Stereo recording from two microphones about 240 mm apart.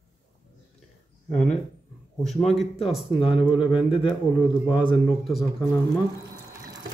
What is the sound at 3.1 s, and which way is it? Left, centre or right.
Speech, left.